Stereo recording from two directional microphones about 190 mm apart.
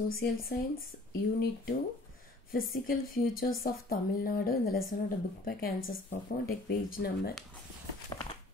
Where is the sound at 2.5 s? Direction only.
50° left (ahead or behind).